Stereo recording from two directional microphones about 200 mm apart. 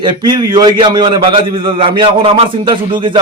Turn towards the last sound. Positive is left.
turn(degrees=-25)  # may be behind; listen again after turning